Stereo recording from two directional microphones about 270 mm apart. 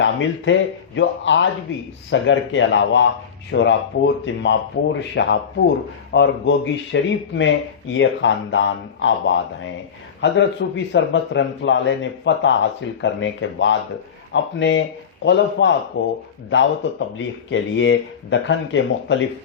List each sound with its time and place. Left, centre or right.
0.0 s speech: left
17.2 s speech: left